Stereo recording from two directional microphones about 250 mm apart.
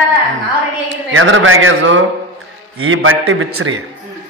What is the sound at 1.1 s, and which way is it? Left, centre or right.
A man's voice, right.